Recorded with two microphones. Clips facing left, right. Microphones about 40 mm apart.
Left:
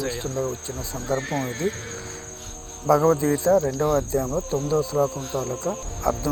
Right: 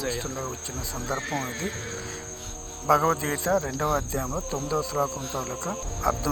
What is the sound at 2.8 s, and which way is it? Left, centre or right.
Cricket, right.